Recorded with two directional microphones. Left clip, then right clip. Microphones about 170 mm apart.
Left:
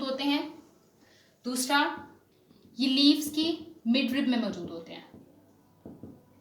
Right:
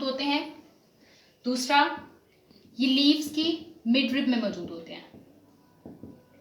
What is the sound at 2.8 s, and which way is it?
A woman's voice, 25° left (ahead or behind).